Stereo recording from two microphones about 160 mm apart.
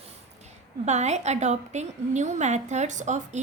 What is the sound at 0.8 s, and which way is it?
A woman's voice, 45° right (ahead or behind).